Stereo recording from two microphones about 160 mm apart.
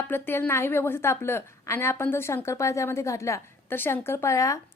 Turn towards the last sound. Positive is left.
turn(degrees=20)  # may be behind; listen again after turning